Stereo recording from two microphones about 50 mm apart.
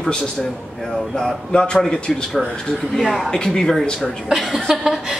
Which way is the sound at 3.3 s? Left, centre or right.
Centre.